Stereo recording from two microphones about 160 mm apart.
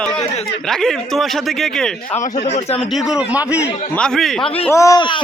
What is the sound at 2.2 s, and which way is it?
Speech, 45° left (ahead or behind).